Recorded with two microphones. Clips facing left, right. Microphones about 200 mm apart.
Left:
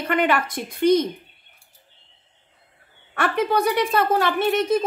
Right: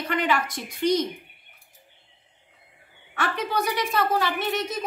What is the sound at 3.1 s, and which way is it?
A woman's voice, 55° left (ahead or behind).